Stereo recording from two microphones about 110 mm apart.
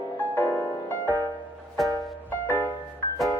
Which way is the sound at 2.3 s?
20° left (ahead or behind).